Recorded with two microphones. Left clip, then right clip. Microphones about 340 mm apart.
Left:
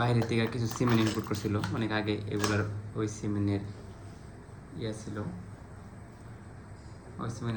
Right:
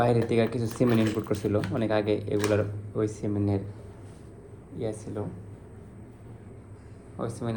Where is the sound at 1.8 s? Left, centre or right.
Right.